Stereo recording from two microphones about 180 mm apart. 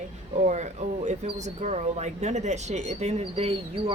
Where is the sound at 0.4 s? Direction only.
40° right (ahead or behind).